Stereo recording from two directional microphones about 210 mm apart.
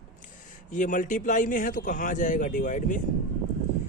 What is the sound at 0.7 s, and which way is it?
Speech, 40° left (ahead or behind).